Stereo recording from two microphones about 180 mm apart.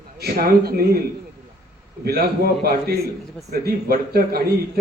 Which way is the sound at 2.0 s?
60° right (ahead or behind).